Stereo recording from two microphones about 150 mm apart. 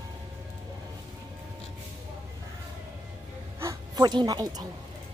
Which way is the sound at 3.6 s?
20° right (ahead or behind).